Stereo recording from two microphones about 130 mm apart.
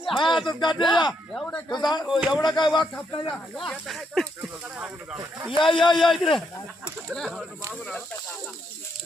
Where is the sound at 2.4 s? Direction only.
35° left (ahead or behind).